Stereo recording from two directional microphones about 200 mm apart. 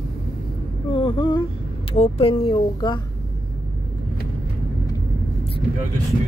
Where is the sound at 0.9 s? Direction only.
25° left (ahead or behind).